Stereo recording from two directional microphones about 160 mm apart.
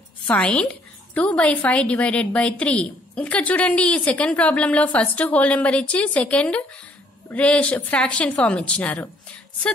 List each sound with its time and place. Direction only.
0.2 s a woman's voice: 10° left (ahead or behind)